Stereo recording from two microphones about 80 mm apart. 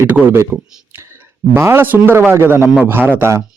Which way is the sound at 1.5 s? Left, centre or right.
Right.